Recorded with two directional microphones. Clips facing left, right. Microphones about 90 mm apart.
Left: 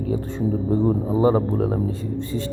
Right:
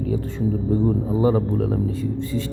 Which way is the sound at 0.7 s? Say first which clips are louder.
Left 1 dB; 30° left (ahead or behind).